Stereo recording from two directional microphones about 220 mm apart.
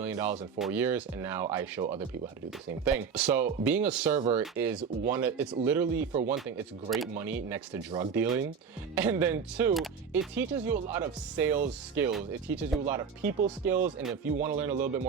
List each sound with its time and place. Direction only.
0.0 s speech: 10° right (ahead or behind)